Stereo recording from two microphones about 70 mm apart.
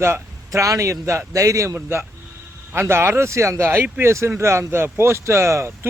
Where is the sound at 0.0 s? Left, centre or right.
Right.